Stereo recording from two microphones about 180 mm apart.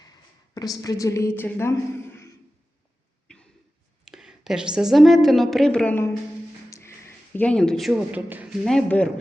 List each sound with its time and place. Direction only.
0.5 s a woman's voice: 20° left (ahead or behind)
4.0 s a woman's voice: 5° right (ahead or behind)
6.7 s music: 15° left (ahead or behind)
7.3 s speech: 5° left (ahead or behind)
8.6 s speech: 5° left (ahead or behind)